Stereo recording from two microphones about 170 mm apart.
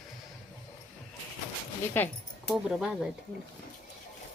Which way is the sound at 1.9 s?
10° left (ahead or behind).